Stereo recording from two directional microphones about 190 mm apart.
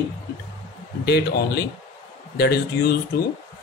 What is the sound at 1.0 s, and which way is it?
Speech, 55° left (ahead or behind).